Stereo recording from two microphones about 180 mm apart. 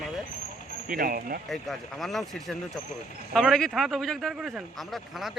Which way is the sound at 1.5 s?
Centre (ahead or behind).